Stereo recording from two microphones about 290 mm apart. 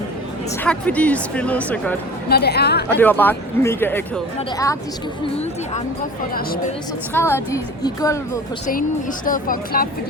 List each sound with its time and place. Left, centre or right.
0.6 s speech: centre
2.3 s a woman's voice: left
3.0 s speech: centre
7.1 s speech: centre
9.2 s speech: left